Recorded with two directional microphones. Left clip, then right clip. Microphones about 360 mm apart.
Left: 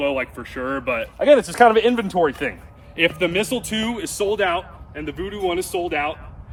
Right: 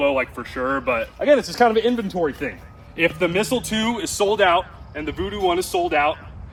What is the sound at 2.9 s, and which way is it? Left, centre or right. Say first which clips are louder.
A man's voice: even; centre.